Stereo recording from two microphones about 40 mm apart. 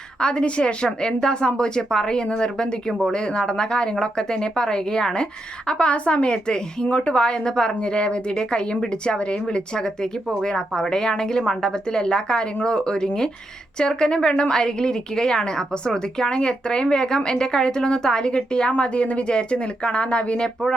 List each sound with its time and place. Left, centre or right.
0.2 s a woman's voice: left